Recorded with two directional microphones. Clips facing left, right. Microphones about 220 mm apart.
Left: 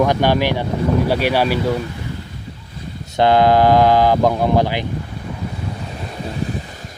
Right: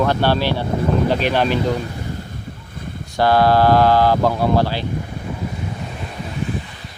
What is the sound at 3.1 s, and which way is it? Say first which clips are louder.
Speech: left 2 dB; 20° left (ahead or behind).